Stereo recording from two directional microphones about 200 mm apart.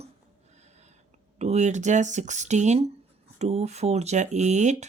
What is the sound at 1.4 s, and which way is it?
Speech, 35° right (ahead or behind).